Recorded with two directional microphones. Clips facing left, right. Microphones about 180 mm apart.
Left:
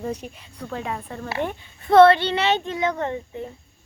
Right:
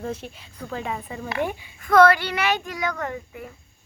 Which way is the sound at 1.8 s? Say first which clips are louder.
Left 3 dB; 25° left (ahead or behind).